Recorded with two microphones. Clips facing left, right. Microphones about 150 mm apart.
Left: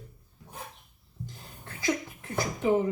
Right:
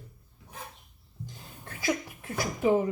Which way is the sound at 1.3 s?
10° right (ahead or behind).